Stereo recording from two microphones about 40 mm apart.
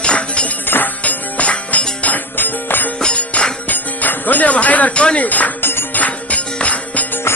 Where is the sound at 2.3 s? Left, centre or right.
Left.